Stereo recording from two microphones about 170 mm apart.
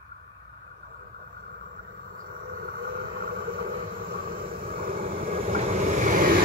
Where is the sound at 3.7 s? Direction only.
35° right (ahead or behind).